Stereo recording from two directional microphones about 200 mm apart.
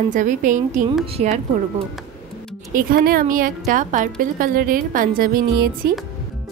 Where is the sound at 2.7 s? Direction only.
50° right (ahead or behind).